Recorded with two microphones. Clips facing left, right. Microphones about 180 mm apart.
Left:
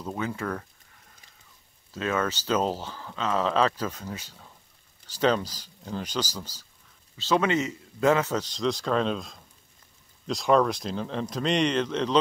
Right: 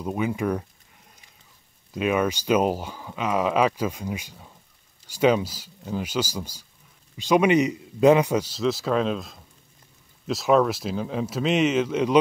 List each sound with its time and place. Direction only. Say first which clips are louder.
0.0 s speech: right 6 dB; 15° right (ahead or behind)
1.9 s speech: right 5 dB; 15° right (ahead or behind)